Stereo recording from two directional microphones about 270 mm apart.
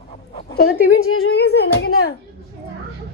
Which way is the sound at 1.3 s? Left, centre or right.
Left.